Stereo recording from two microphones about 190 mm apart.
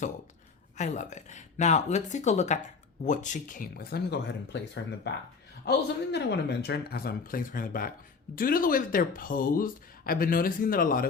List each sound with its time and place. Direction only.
0.8 s speech: 40° left (ahead or behind)